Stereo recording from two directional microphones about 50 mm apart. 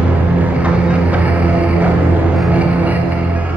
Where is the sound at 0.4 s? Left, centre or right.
Right.